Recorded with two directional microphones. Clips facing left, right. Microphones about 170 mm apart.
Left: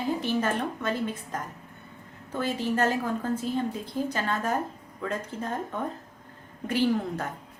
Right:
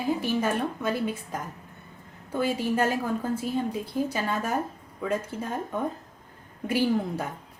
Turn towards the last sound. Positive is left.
turn(degrees=-10)  # may be behind; listen again after turning